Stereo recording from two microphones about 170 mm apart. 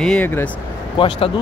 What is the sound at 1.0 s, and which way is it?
Speech, 30° left (ahead or behind).